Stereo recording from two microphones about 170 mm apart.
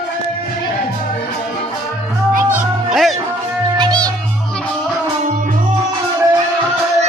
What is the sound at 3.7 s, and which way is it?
Music, 25° right (ahead or behind).